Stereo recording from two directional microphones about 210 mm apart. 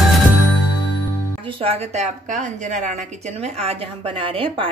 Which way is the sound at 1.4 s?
25° right (ahead or behind).